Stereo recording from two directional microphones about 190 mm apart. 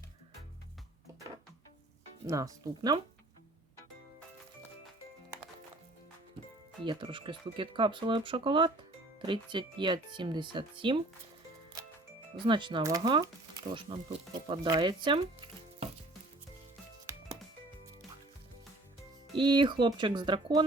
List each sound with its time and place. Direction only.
2.2 s speech: 15° right (ahead or behind)
6.8 s speech: 25° right (ahead or behind)
11.8 s music: 20° right (ahead or behind)
12.5 s speech: 25° right (ahead or behind)
17.1 s music: 15° right (ahead or behind)
19.4 s speech: 25° right (ahead or behind)